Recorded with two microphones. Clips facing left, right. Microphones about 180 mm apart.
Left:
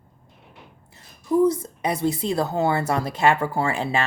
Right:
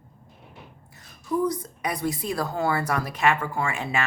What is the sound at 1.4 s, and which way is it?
A woman's voice, 25° left (ahead or behind).